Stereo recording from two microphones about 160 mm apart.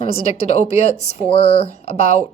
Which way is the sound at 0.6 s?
40° left (ahead or behind).